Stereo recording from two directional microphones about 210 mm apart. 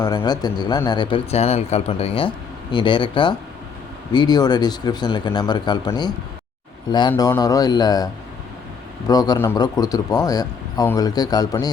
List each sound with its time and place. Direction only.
0.0 s a man's voice: 20° left (ahead or behind)